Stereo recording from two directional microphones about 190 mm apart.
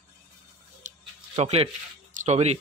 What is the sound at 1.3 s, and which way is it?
Speech, 30° right (ahead or behind).